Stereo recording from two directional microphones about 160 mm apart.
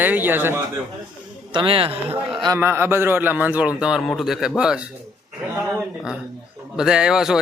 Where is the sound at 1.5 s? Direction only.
35° right (ahead or behind).